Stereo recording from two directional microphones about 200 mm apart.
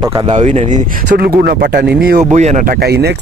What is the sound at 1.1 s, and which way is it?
Speech, 50° right (ahead or behind).